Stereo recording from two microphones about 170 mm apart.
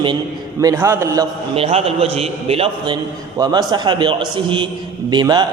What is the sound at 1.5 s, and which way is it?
A man's voice, 35° right (ahead or behind).